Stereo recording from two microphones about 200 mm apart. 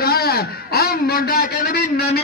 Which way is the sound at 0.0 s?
50° left (ahead or behind).